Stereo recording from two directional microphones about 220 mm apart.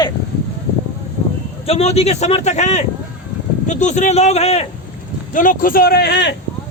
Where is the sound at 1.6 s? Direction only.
25° left (ahead or behind); by 6.3 s 50° left (ahead or behind).